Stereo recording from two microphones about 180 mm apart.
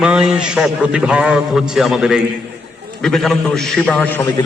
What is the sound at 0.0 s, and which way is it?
A man's voice, 5° right (ahead or behind).